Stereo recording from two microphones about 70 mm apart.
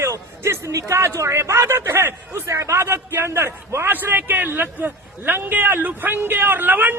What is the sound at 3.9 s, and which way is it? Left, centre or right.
A man's voice, right.